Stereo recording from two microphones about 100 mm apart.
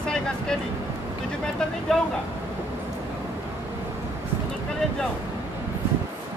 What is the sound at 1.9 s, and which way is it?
Speech, 5° left (ahead or behind).